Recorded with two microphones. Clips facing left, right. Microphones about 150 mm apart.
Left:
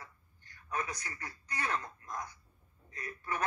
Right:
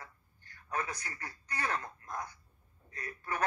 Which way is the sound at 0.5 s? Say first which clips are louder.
Right 1 dB; 35° right (ahead or behind).